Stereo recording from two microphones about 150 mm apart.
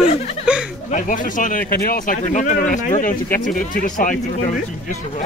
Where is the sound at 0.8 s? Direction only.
60° left (ahead or behind).